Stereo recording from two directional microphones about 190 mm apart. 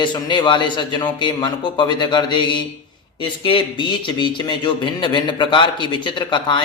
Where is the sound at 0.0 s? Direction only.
25° left (ahead or behind).